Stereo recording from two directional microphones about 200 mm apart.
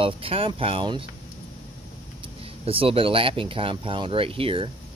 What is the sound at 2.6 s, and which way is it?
Speech, 25° right (ahead or behind).